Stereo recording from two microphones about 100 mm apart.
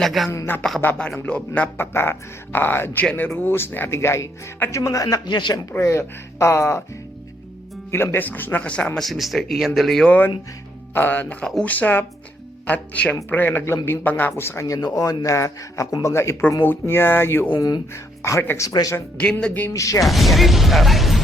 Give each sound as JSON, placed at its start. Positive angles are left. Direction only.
{"t": 0.0, "sound": "a sound", "side_deg": 0}
{"t": 0.3, "sound": "speech", "side_deg": 25}
{"t": 0.9, "sound": "speech", "side_deg": 10}
{"t": 5.8, "sound": "speech", "side_deg": 30}
{"t": 7.9, "sound": "speech", "side_deg": 25}
{"t": 9.0, "sound": "speech", "side_deg": 0}
{"t": 10.1, "sound": "speech", "side_deg": 20}
{"t": 18.7, "sound": "speech", "side_deg": 40}
{"t": 18.9, "sound": "speech", "side_deg": 15}
{"t": 19.7, "sound": "speech", "side_deg": 35}
{"t": 20.1, "sound": "speech", "side_deg": 0}